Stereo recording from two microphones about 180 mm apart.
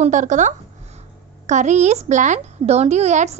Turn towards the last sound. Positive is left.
turn(degrees=-40)  # may be behind; listen again after turning